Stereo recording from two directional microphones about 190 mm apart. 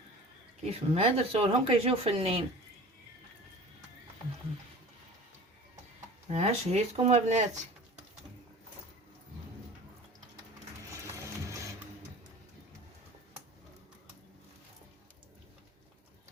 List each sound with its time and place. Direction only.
0.6 s speech: 35° right (ahead or behind)
6.2 s speech: 35° right (ahead or behind)
11.4 s music: 15° right (ahead or behind)